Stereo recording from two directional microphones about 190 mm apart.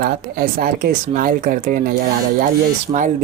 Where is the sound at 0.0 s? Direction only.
50° right (ahead or behind).